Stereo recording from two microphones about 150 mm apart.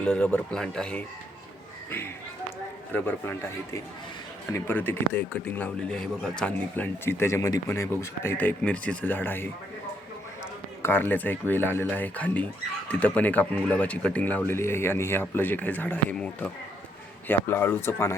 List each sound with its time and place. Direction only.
0.0 s speech: 5° left (ahead or behind)
1.9 s a sound: 15° left (ahead or behind)
2.9 s speech: 15° left (ahead or behind)
10.8 s speech: 15° left (ahead or behind)